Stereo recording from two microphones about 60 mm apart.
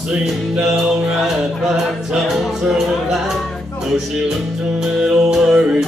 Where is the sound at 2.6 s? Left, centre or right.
Centre.